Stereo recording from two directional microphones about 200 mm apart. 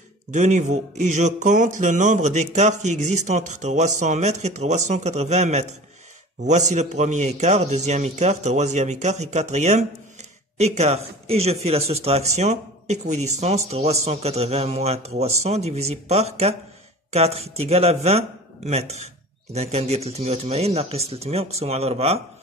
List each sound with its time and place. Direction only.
0.3 s speech: 35° right (ahead or behind)